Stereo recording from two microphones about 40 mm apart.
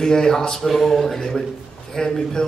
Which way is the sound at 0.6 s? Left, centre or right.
Centre.